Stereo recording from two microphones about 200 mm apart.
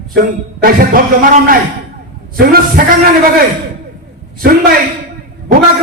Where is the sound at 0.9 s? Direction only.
45° right (ahead or behind).